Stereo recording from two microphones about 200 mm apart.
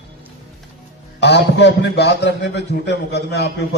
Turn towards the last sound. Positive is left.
turn(degrees=55)  # may be behind; listen again after turning